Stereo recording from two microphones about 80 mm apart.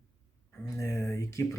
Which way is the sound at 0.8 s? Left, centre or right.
Left.